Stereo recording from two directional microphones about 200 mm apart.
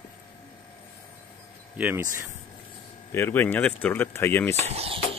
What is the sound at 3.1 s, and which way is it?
Speech, 10° left (ahead or behind).